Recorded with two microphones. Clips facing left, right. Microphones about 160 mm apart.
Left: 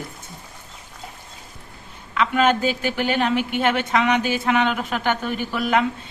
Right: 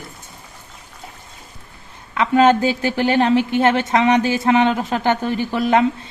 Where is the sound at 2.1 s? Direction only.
35° right (ahead or behind).